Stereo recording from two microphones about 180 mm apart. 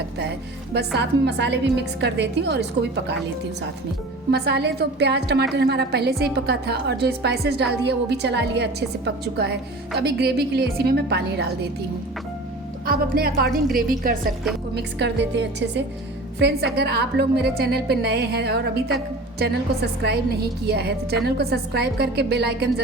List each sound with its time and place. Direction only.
0.9 s a woman's voice: 70° right (ahead or behind)
4.3 s a woman's voice: 65° right (ahead or behind)
12.8 s a woman's voice: 55° right (ahead or behind)
14.8 s a woman's voice: 75° right (ahead or behind)